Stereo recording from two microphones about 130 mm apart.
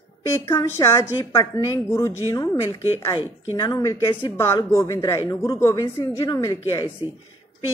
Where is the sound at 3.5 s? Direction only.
35° left (ahead or behind).